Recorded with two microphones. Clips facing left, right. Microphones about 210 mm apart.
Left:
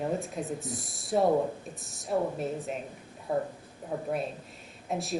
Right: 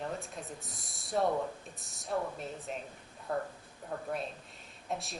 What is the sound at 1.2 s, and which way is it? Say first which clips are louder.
Speech: left 6 dB; 25° left (ahead or behind).